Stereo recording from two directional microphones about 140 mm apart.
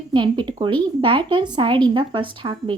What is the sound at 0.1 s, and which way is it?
A woman's voice, 35° right (ahead or behind).